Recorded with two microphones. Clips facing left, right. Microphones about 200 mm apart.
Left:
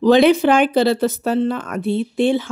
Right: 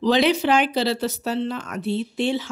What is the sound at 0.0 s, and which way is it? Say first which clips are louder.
Speech: left 7 dB; 50° left (ahead or behind).